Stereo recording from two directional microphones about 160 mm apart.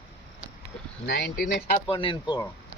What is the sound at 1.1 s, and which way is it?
Speech, 90° left.